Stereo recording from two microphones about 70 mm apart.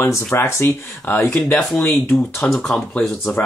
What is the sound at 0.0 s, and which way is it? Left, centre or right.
Speech, left.